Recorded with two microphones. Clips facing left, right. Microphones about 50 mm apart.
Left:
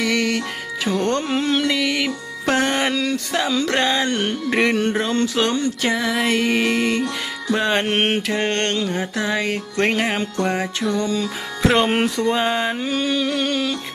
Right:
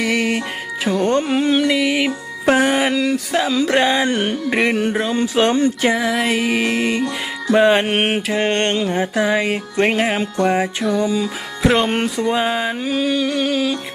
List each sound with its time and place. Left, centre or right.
0.0 s music: centre
5.4 s a sound: right
5.9 s music: centre
8.7 s music: right; by 13.7 s centre